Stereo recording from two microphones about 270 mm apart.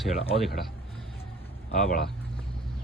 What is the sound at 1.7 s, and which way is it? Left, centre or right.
Speech, left.